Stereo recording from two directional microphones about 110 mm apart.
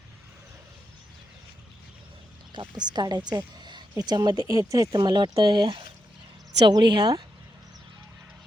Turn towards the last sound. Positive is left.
turn(degrees=-40)  # may be behind; listen again after turning